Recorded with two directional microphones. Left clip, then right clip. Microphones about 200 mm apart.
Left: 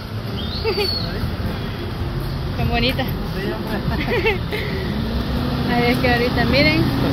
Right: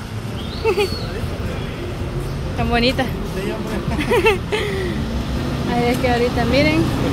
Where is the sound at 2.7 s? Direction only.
30° right (ahead or behind).